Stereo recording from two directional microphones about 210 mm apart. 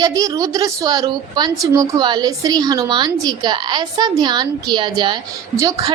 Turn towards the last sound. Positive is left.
turn(degrees=-15)  # may be behind; listen again after turning